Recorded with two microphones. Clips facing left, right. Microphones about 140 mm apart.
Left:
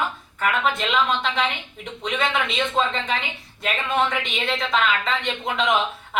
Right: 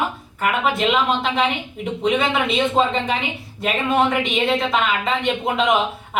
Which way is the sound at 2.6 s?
25° right (ahead or behind).